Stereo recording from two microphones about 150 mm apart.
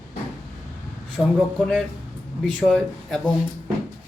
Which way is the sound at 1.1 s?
5° left (ahead or behind).